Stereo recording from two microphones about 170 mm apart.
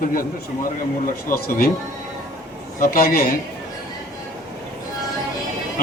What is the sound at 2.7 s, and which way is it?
Speech, 60° left (ahead or behind).